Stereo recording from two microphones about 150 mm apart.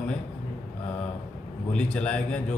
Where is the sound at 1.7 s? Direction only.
5° left (ahead or behind).